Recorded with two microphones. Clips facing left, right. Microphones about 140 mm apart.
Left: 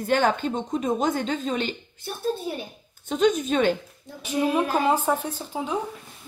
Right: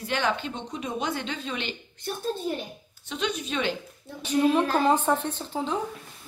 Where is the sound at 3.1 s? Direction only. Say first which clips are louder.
Left 9 dB; 45° left (ahead or behind).